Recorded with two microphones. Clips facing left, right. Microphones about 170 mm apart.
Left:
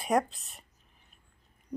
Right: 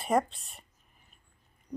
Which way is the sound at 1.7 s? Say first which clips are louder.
Left 1 dB; 5° left (ahead or behind).